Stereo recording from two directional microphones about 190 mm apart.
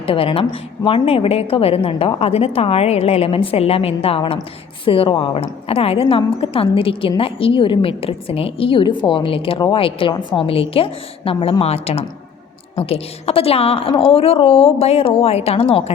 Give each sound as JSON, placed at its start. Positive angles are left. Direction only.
{"t": 0.0, "sound": "a woman's voice", "side_deg": 30}